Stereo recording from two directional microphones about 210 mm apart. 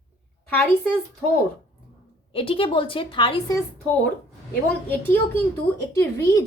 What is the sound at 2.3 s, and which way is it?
A woman's voice, 25° left (ahead or behind).